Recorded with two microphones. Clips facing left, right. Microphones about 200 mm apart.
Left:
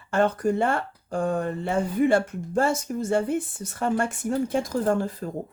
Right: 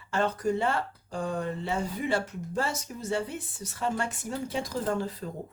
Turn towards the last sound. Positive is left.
turn(degrees=50)  # may be behind; listen again after turning